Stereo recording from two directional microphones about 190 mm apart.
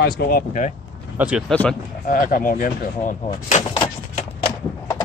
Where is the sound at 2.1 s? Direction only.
45° left (ahead or behind).